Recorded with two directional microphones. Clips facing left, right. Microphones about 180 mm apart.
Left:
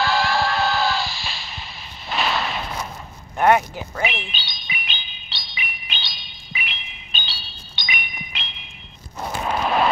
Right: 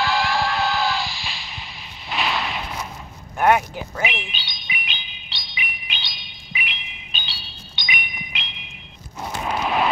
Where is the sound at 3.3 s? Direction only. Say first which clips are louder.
Left 1 dB; 10° right (ahead or behind).